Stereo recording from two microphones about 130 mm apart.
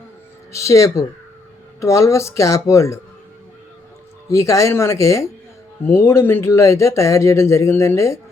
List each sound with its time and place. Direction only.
0.5 s speech: 25° left (ahead or behind)
4.3 s speech: 25° left (ahead or behind)